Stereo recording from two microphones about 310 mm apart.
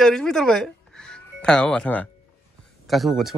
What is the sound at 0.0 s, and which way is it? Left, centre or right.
A woman's voice, centre.